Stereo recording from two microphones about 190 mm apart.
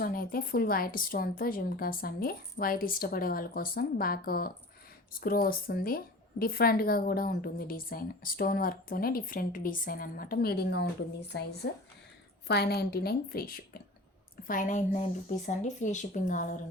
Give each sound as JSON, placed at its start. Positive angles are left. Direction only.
{"t": 0.0, "sound": "a woman's voice", "side_deg": 50}